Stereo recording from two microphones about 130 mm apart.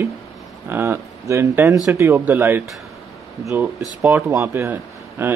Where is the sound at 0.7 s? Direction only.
20° right (ahead or behind).